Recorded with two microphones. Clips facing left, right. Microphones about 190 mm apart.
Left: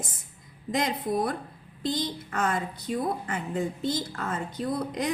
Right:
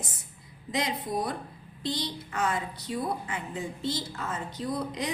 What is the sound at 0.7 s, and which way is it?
A woman's voice, 50° left (ahead or behind).